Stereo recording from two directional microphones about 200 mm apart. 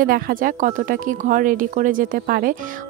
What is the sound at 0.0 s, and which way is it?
Speech, 45° right (ahead or behind).